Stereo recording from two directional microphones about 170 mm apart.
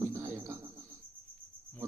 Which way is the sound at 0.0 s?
15° right (ahead or behind).